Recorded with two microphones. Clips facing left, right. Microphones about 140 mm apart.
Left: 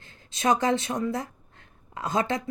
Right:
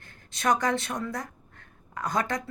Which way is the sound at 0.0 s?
55° right (ahead or behind).